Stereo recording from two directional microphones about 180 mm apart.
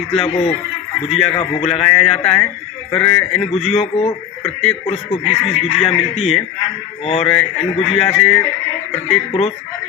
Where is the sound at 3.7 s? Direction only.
35° left (ahead or behind).